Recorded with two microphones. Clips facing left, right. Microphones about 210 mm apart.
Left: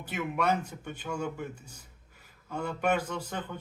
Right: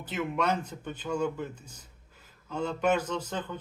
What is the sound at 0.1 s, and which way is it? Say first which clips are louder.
Speech: even; 10° left (ahead or behind).